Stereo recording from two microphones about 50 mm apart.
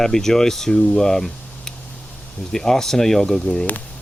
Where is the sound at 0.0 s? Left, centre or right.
Centre.